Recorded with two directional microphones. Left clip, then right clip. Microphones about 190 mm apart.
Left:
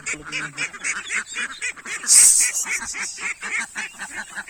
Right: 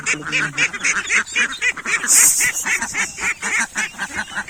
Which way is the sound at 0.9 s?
25° left (ahead or behind).